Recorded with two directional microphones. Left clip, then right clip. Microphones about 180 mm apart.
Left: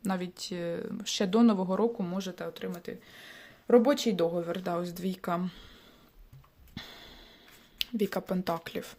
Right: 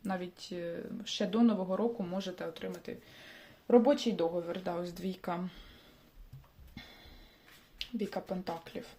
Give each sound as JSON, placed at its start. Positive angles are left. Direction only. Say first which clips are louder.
{"t": 0.0, "sound": "speech", "louder": "left 4 dB", "side_deg": 30}
{"t": 6.8, "sound": "music", "louder": "left 7 dB", "side_deg": 45}
{"t": 7.8, "sound": "speech", "louder": "left 7 dB", "side_deg": 40}